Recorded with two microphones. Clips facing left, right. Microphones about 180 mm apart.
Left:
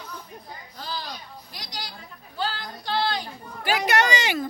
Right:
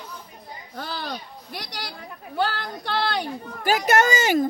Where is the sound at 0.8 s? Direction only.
60° right (ahead or behind).